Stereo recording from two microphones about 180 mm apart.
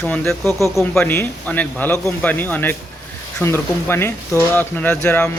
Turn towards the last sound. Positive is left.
turn(degrees=10)  # may be behind; listen again after turning